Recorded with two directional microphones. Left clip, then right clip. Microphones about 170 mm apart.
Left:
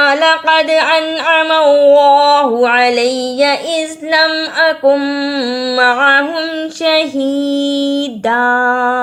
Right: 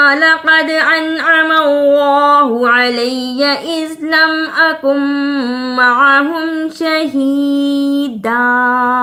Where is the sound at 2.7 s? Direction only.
20° left (ahead or behind).